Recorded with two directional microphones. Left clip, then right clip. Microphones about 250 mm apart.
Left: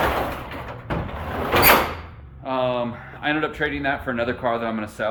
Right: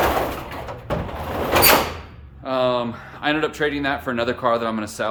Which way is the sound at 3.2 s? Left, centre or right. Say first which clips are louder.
Right 2 dB; centre.